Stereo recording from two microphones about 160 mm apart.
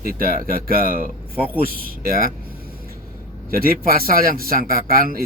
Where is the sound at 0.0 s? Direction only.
65° right (ahead or behind).